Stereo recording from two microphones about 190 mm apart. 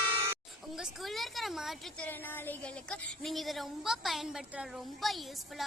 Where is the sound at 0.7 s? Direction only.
Centre (ahead or behind).